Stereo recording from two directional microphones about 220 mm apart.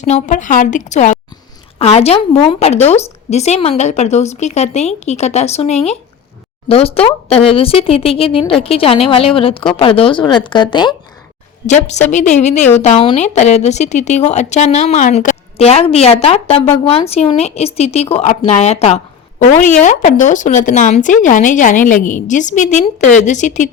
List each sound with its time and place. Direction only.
0.0 s speech: 35° left (ahead or behind)
11.9 s speech: 35° left (ahead or behind)